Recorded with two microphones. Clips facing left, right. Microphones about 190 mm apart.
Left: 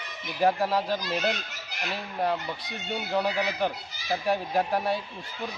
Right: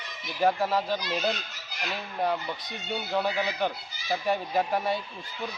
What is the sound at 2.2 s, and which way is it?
Speech, centre (ahead or behind).